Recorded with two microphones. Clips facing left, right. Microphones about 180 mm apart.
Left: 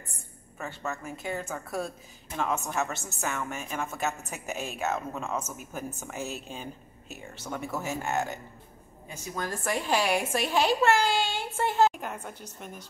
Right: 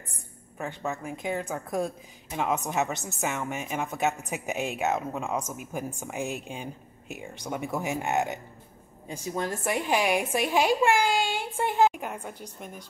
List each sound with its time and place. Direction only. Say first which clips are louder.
0.6 s a woman's voice: right 3 dB; 15° right (ahead or behind)
9.1 s a woman's voice: right 4 dB; 30° right (ahead or behind); by 12.8 s 10° right (ahead or behind)